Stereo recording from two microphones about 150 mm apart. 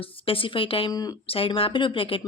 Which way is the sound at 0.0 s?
40° left (ahead or behind).